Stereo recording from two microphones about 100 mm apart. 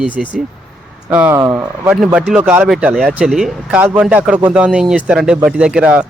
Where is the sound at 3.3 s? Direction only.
5° right (ahead or behind).